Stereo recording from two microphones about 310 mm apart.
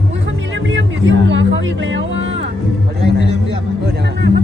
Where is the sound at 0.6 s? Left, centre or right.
Right.